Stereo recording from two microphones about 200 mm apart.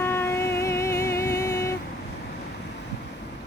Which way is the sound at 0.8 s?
15° left (ahead or behind).